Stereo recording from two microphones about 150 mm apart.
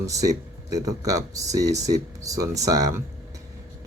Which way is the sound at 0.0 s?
20° right (ahead or behind).